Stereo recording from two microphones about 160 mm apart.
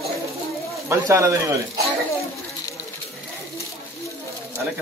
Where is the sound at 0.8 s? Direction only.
15° right (ahead or behind).